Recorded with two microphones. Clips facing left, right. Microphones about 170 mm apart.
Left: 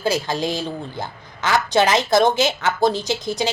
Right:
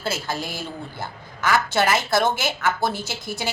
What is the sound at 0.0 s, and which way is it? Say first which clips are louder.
A woman's voice: left 6 dB; 15° left (ahead or behind).